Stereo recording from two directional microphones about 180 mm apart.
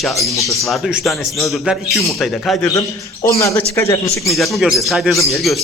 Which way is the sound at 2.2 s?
Centre (ahead or behind).